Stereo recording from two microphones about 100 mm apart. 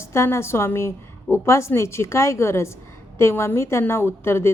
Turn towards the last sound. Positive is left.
turn(degrees=25)  # may be behind; listen again after turning